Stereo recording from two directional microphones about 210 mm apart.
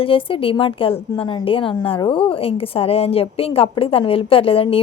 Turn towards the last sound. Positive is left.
turn(degrees=25)  # may be behind; listen again after turning